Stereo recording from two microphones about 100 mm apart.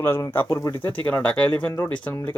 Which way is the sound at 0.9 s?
15° left (ahead or behind).